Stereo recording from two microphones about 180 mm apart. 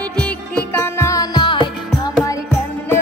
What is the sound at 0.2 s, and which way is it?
Music, 10° left (ahead or behind).